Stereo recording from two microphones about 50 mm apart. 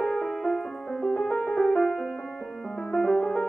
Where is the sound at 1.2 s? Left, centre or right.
Left.